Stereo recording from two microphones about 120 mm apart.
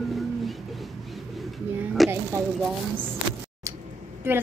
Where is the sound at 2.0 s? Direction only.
Centre (ahead or behind).